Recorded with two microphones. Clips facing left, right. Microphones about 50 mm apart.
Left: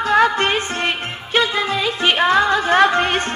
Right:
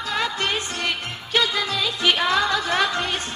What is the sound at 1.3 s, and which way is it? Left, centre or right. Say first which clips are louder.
Music: left 4 dB; left.